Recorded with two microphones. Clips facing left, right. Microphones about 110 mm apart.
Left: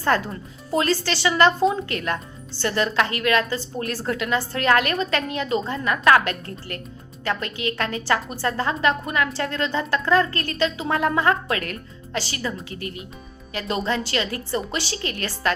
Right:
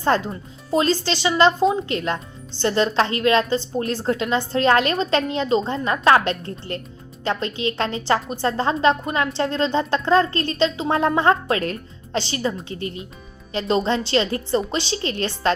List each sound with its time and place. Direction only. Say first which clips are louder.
0.0 s a woman's voice: right 2 dB; 25° right (ahead or behind)